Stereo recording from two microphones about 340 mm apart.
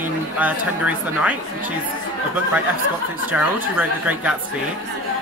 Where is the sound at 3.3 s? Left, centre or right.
Centre.